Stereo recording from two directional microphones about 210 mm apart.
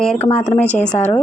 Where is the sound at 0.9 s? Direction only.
15° left (ahead or behind).